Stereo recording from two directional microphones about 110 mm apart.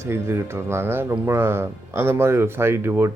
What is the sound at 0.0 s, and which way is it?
Speech, 25° right (ahead or behind).